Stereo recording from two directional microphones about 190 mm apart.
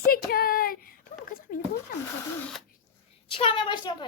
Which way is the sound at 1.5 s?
45° left (ahead or behind).